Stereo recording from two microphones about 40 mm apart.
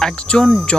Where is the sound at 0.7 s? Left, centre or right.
Left.